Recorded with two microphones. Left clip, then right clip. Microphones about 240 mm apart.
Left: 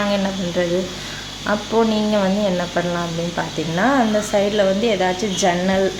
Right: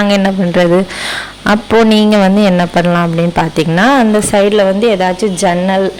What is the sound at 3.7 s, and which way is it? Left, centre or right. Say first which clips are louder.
Speech: right 7 dB; right.